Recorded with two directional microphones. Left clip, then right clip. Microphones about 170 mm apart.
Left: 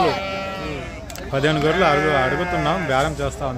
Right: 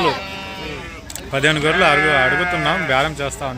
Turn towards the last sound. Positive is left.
turn(degrees=0)  # may be behind; listen again after turning